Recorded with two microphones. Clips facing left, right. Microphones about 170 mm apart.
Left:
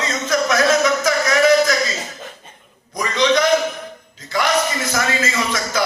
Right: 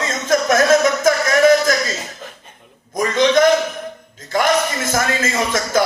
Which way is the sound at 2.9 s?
50° right (ahead or behind).